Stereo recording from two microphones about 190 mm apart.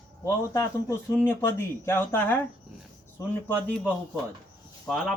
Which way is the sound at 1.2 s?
10° left (ahead or behind).